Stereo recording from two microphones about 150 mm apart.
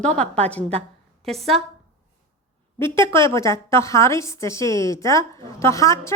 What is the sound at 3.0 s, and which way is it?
A woman's voice, 20° left (ahead or behind).